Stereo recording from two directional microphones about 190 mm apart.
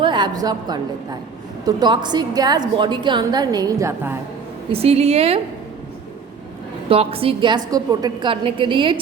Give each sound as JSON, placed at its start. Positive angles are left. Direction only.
{"t": 0.0, "sound": "a woman's voice", "side_deg": -25}
{"t": 4.7, "sound": "a woman's voice", "side_deg": -30}
{"t": 6.8, "sound": "a woman's voice", "side_deg": -30}